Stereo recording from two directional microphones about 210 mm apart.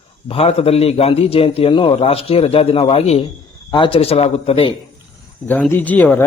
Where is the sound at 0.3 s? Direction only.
30° left (ahead or behind).